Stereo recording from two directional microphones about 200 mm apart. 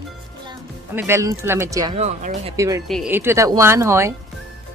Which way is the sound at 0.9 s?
10° right (ahead or behind).